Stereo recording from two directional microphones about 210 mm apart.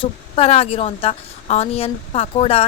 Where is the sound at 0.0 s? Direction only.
30° left (ahead or behind).